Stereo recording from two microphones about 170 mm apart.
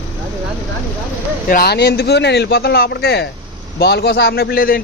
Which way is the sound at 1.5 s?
65° left (ahead or behind).